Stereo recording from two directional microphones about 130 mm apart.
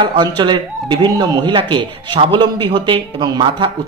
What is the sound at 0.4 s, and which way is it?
Speech, 35° right (ahead or behind).